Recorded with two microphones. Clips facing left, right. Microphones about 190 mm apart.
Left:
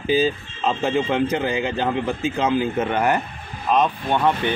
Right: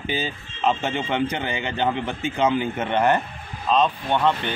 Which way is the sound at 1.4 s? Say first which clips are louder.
Left 3 dB; 90° left.